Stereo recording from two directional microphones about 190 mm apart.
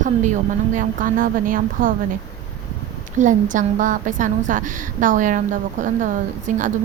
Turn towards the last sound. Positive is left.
turn(degrees=-45)  # may be behind; listen again after turning